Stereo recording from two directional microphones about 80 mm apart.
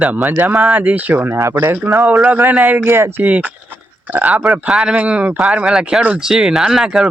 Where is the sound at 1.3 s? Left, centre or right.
Right.